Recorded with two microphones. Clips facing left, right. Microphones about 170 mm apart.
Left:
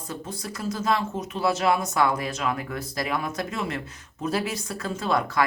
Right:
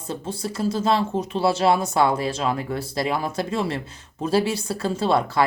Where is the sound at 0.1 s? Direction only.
30° right (ahead or behind).